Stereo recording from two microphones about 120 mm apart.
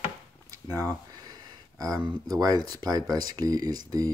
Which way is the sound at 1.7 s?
30° right (ahead or behind).